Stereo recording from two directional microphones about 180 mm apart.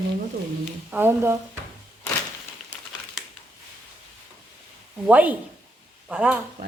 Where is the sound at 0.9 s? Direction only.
10° right (ahead or behind).